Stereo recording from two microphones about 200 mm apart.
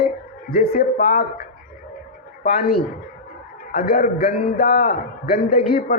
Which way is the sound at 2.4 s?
45° left (ahead or behind).